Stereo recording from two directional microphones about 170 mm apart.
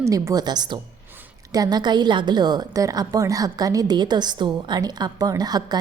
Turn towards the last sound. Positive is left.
turn(degrees=-25)  # may be behind; listen again after turning